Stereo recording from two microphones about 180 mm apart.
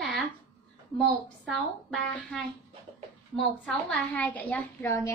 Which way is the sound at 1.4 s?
5° left (ahead or behind).